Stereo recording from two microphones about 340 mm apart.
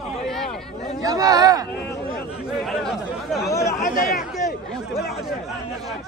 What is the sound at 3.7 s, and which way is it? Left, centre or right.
Speech, left.